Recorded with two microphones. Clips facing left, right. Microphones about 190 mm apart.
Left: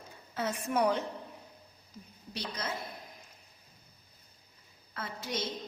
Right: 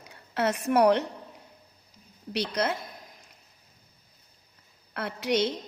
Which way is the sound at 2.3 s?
75° right (ahead or behind).